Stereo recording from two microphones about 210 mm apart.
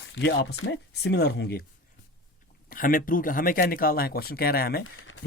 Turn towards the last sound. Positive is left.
turn(degrees=45)  # may be behind; listen again after turning